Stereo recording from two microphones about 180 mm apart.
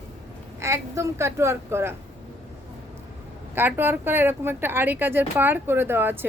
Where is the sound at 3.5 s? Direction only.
10° right (ahead or behind).